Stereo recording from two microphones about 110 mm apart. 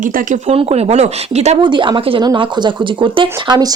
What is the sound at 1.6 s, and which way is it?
A woman's voice, 45° right (ahead or behind).